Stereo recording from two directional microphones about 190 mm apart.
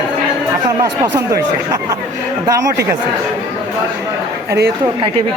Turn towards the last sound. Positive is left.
turn(degrees=-55)  # may be behind; listen again after turning